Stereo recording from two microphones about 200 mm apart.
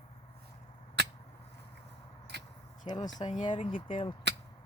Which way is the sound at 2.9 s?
20° left (ahead or behind).